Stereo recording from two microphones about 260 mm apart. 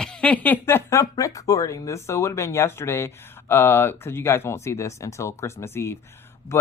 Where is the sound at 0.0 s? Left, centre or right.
Centre.